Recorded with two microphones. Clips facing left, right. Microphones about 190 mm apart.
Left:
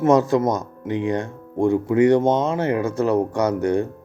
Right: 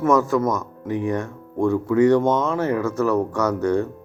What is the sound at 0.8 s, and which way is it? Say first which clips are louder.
Speech: left 1 dB; 15° left (ahead or behind).